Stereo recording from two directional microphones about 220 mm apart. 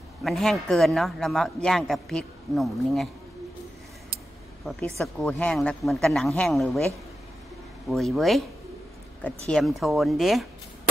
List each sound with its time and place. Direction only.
0.2 s a man's voice: centre (ahead or behind)
4.6 s a man's voice: centre (ahead or behind)
7.9 s a man's voice: centre (ahead or behind)